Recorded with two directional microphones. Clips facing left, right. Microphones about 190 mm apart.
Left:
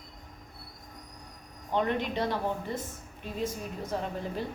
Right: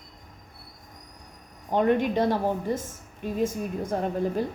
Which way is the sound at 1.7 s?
50° right (ahead or behind).